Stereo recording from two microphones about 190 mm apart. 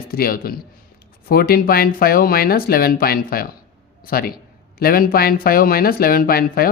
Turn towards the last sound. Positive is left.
turn(degrees=50)  # may be behind; listen again after turning